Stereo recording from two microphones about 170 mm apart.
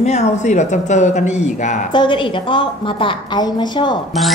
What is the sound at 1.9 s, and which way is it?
A woman's voice, 30° left (ahead or behind).